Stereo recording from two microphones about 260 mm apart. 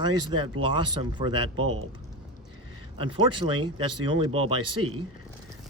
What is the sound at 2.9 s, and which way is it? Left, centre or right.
Speech, centre.